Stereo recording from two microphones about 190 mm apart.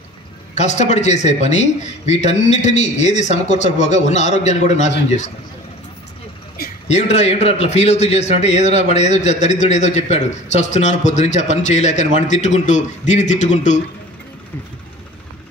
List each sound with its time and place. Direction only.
0.6 s a man's voice: 35° left (ahead or behind)
6.9 s a man's voice: 35° left (ahead or behind)